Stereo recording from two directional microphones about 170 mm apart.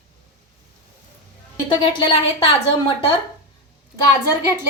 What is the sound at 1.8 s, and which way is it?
Speech, 25° left (ahead or behind).